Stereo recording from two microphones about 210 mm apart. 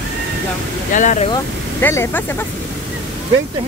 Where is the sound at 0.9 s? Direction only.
35° left (ahead or behind).